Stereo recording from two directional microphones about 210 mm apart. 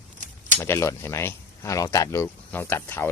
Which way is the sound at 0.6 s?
15° left (ahead or behind).